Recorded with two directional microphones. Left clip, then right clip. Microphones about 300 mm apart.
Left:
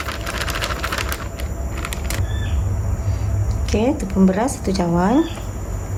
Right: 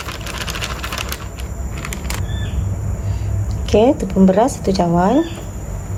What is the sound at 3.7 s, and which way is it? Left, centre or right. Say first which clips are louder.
Speech: right 7 dB; centre.